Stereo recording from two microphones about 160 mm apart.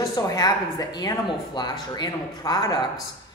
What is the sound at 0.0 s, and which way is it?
A man's voice, 25° left (ahead or behind).